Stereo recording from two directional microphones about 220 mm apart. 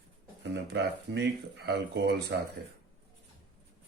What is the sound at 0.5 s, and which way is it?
Speech, 50° right (ahead or behind).